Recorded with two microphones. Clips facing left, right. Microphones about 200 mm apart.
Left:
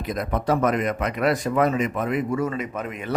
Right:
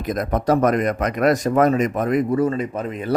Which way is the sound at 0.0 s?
45° right (ahead or behind).